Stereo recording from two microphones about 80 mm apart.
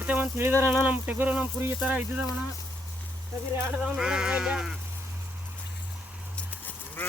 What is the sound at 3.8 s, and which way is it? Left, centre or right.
Speech, centre.